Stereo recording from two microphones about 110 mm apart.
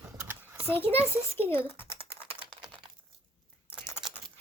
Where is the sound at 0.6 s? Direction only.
20° left (ahead or behind).